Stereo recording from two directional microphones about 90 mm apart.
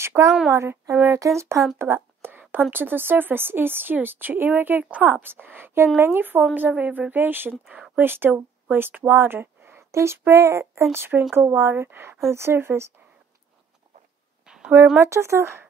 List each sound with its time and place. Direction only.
0.0 s a woman's voice: 30° right (ahead or behind)
2.0 s a sound: 20° right (ahead or behind)
2.7 s a woman's voice: 20° right (ahead or behind)
7.6 s a woman's voice: 10° right (ahead or behind); by 12.9 s 30° right (ahead or behind)
14.4 s a sound: 5° right (ahead or behind)
15.0 s speech: 30° right (ahead or behind)